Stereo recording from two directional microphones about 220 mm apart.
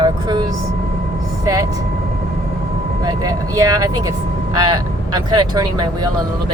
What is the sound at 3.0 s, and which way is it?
Speech, 15° right (ahead or behind).